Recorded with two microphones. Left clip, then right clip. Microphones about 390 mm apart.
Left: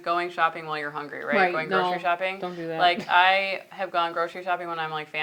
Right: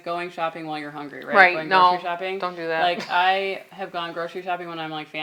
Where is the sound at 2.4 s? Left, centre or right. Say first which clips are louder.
Right 5 dB; right.